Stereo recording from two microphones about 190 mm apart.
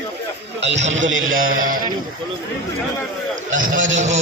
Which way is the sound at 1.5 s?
45° right (ahead or behind).